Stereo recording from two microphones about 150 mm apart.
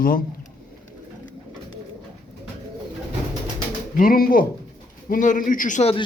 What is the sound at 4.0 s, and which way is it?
Speech, 75° left (ahead or behind).